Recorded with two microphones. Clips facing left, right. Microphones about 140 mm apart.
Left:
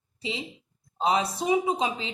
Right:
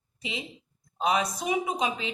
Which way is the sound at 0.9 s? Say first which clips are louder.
Left 1 dB; 30° left (ahead or behind).